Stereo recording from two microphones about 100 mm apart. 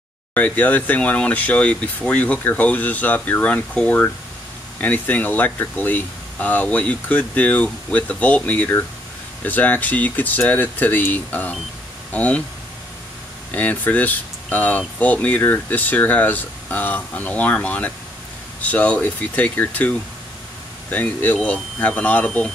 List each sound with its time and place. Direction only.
0.3 s speech: 15° left (ahead or behind)
13.5 s speech: 15° left (ahead or behind)